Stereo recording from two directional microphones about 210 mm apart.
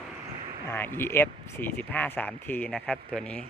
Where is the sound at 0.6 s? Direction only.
10° left (ahead or behind).